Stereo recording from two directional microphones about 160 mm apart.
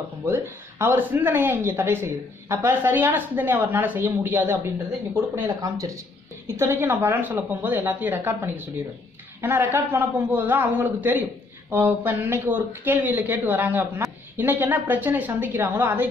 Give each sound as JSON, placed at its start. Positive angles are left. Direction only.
{"t": 0.2, "sound": "speech", "side_deg": -15}